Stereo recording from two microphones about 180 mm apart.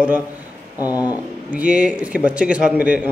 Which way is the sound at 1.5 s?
10° right (ahead or behind).